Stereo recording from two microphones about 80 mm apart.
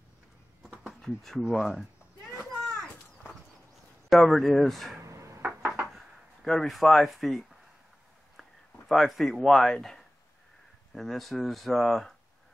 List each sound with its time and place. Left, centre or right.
1.0 s speech: centre
2.3 s children playing: centre
4.1 s speech: centre
5.0 s a sound: right
5.4 s a sound: centre
5.9 s speech: centre